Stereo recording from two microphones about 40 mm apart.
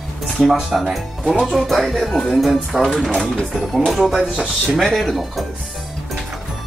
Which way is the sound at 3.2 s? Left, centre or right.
Centre.